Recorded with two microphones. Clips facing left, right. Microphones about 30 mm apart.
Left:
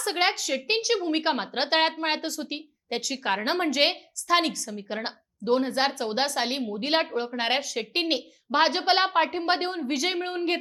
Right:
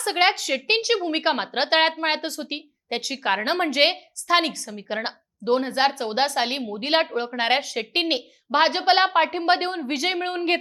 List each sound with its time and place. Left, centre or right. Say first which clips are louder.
0.0 s a woman's voice: right 4 dB; centre